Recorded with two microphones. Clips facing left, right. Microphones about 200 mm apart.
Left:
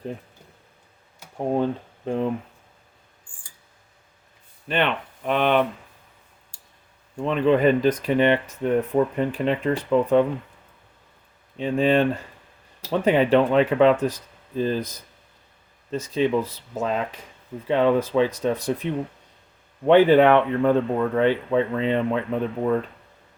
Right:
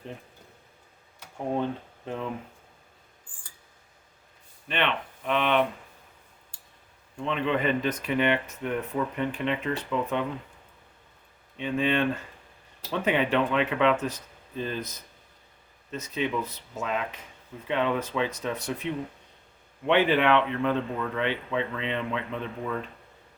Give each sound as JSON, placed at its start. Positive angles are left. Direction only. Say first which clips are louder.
{"t": 1.4, "sound": "speech", "louder": "left 6 dB", "side_deg": 35}
{"t": 4.7, "sound": "speech", "louder": "left 5 dB", "side_deg": 40}
{"t": 7.3, "sound": "speech", "louder": "left 8 dB", "side_deg": 40}
{"t": 11.5, "sound": "speech", "louder": "left 6 dB", "side_deg": 35}
{"t": 15.9, "sound": "speech", "louder": "left 8 dB", "side_deg": 35}